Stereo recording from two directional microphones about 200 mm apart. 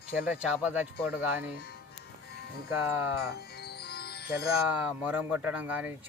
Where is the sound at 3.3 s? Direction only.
55° left (ahead or behind).